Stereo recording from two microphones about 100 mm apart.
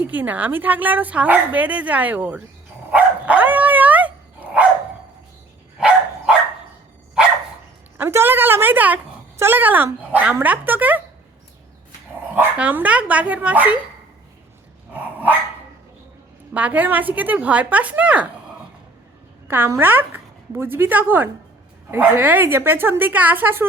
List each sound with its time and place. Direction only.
0.0 s speech: 15° right (ahead or behind)
2.9 s dog: 15° right (ahead or behind)
6.3 s dog: 10° right (ahead or behind)
7.9 s a sound: 20° right (ahead or behind)
9.4 s a woman's voice: 20° right (ahead or behind)
12.4 s speech: 15° right (ahead or behind)
14.9 s dog: 20° right (ahead or behind)
16.6 s speech: 15° right (ahead or behind)
19.5 s a woman's voice: 25° right (ahead or behind)